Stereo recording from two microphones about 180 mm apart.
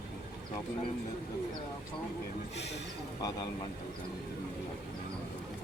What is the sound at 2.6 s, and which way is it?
Speech, 70° left (ahead or behind).